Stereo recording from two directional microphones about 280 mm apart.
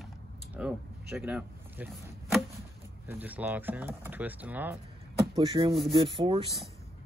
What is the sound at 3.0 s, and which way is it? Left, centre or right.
Speech, centre.